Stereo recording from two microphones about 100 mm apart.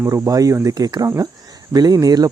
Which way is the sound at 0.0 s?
35° right (ahead or behind).